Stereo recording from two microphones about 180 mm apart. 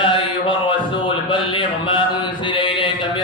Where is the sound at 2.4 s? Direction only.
25° left (ahead or behind).